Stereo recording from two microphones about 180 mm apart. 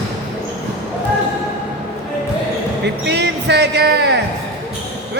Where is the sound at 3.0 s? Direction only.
70° right (ahead or behind).